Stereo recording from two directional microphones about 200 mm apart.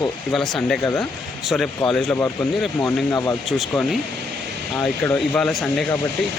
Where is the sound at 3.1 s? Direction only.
15° left (ahead or behind).